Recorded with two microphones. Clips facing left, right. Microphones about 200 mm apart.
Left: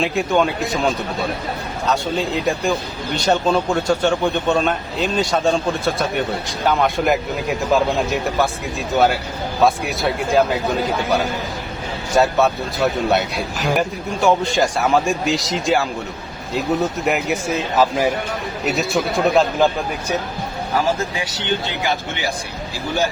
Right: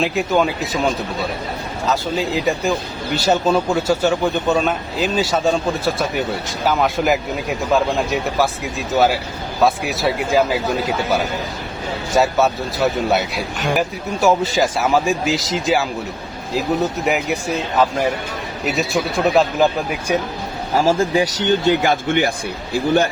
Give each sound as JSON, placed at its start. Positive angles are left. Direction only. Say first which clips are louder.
{"t": 0.0, "sound": "a man's voice", "louder": "even", "side_deg": 0}
{"t": 1.9, "sound": "a man's voice", "louder": "even", "side_deg": 0}
{"t": 9.6, "sound": "a man's voice", "louder": "right 1 dB", "side_deg": 0}
{"t": 12.1, "sound": "a man's voice", "louder": "even", "side_deg": 0}
{"t": 20.7, "sound": "speech", "louder": "right 5 dB", "side_deg": -35}